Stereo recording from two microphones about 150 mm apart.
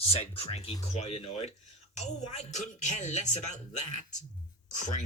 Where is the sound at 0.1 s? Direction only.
40° left (ahead or behind).